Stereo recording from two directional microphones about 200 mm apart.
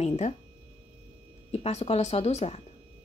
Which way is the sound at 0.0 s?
30° left (ahead or behind).